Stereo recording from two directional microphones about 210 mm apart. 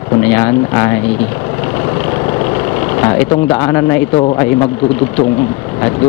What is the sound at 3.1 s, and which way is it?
Speech, 15° left (ahead or behind).